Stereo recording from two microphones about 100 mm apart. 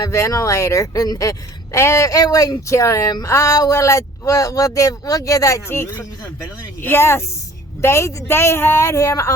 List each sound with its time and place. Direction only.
0.0 s a woman's voice: 30° left (ahead or behind)